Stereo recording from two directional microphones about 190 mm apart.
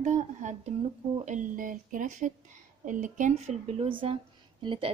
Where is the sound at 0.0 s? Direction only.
40° right (ahead or behind).